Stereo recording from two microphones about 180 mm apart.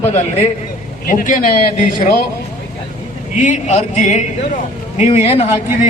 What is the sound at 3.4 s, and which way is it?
Speech, 40° left (ahead or behind).